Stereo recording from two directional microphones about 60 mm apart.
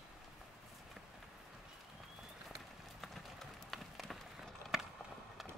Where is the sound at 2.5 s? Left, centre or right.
Centre.